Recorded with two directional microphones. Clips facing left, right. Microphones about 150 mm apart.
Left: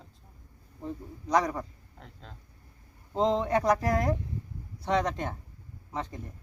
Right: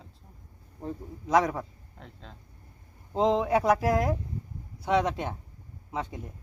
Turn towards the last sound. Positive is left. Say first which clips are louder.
# right 2 dB
turn(degrees=-5)  # may be behind; listen again after turning